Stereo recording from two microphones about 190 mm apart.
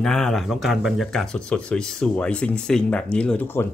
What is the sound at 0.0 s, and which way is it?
Speech, centre (ahead or behind).